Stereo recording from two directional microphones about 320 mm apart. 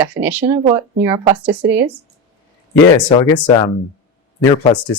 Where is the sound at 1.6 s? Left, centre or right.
Right.